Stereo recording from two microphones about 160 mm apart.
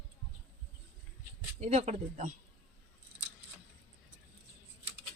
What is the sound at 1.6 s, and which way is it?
Speech, 45° right (ahead or behind).